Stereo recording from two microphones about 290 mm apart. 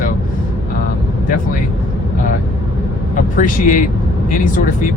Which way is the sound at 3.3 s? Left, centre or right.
Left.